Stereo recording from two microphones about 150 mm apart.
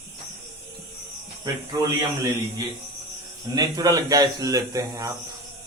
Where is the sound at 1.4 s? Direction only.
25° right (ahead or behind).